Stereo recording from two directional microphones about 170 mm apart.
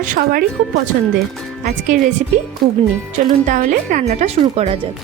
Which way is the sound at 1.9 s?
50° right (ahead or behind).